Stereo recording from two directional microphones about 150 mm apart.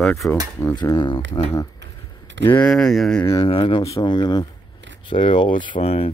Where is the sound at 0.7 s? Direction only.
30° left (ahead or behind).